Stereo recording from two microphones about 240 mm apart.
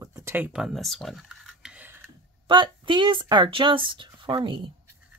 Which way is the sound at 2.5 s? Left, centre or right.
Centre.